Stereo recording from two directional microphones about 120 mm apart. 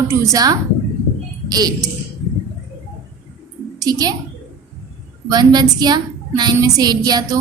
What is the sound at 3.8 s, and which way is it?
Speech, 30° right (ahead or behind).